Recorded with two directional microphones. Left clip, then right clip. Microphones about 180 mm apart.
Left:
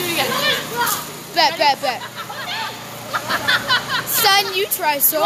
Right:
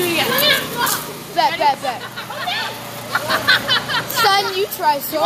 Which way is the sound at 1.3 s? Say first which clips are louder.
Even; 40° left (ahead or behind).